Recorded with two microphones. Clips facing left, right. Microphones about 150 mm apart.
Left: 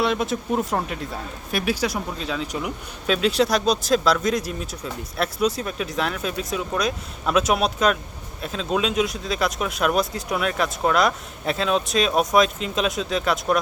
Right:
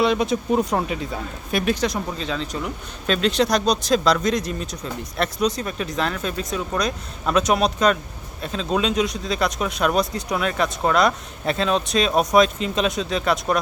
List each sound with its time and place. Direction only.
0.0 s speech: centre (ahead or behind)